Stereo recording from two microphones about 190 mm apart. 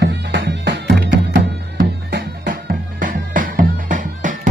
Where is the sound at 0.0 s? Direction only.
60° right (ahead or behind).